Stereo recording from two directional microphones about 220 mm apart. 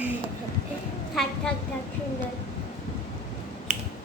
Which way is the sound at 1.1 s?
Centre (ahead or behind).